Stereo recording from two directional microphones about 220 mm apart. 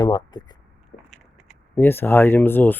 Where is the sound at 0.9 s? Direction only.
50° left (ahead or behind).